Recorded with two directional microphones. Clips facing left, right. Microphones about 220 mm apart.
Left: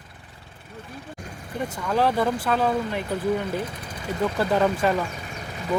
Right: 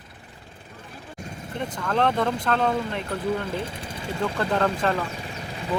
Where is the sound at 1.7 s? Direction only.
5° left (ahead or behind).